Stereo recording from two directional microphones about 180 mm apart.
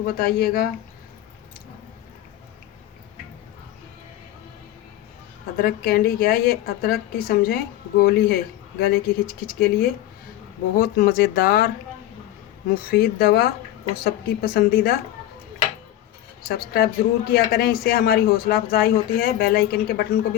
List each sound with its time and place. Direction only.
0.0 s a man's voice: 55° left (ahead or behind)
5.5 s a man's voice: 55° left (ahead or behind)
12.9 s a man's voice: 60° left (ahead or behind)
16.5 s a man's voice: 60° left (ahead or behind)